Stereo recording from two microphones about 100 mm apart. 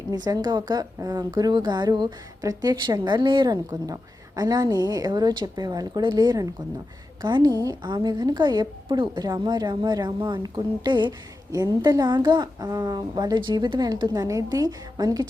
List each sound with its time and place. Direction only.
0.1 s a woman's voice: 40° right (ahead or behind)
3.5 s a woman's voice: 35° right (ahead or behind)